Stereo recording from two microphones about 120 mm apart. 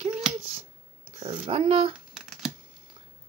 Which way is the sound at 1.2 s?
60° right (ahead or behind).